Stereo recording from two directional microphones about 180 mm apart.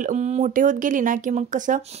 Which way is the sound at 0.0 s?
40° right (ahead or behind).